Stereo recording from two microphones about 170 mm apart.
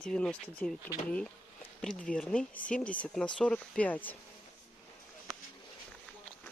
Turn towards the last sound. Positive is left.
turn(degrees=0)  # may be behind; listen again after turning